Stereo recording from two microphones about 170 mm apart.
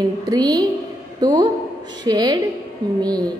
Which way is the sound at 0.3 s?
20° right (ahead or behind).